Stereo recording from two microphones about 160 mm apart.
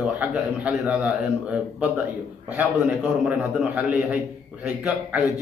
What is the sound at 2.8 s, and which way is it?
A man's voice, 5° right (ahead or behind).